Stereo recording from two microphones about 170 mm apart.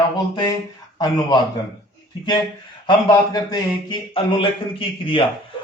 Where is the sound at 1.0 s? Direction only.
20° left (ahead or behind).